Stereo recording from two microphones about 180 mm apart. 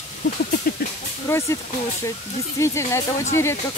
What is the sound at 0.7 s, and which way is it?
Goat, 55° left (ahead or behind).